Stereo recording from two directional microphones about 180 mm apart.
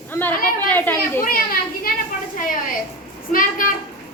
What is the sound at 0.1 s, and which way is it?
Chatter, 10° left (ahead or behind).